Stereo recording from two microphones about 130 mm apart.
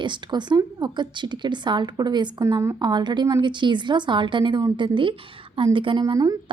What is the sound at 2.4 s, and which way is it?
Speech, 25° right (ahead or behind).